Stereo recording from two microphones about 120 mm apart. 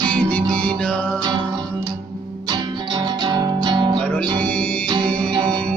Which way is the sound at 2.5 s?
40° right (ahead or behind).